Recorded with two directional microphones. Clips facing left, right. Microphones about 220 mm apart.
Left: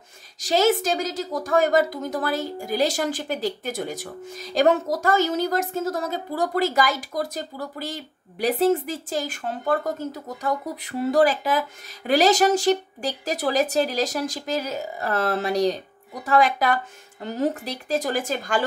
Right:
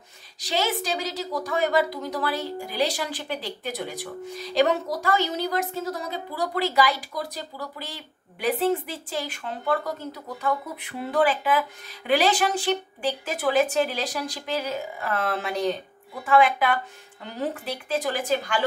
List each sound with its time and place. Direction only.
0.4 s speech: 45° left (ahead or behind)